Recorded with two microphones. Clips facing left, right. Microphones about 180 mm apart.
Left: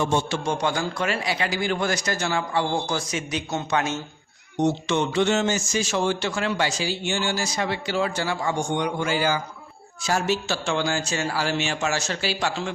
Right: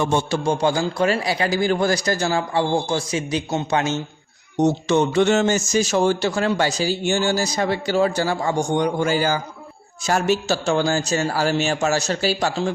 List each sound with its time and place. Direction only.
0.3 s speech: 35° right (ahead or behind)
4.5 s speech: 40° right (ahead or behind)